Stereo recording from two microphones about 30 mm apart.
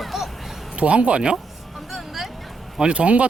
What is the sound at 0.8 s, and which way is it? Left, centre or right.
Speech, right.